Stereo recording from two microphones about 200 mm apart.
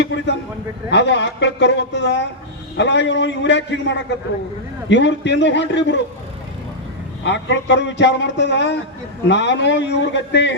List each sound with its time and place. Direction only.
0.9 s speech: 60° left (ahead or behind)
7.3 s speech: 60° left (ahead or behind)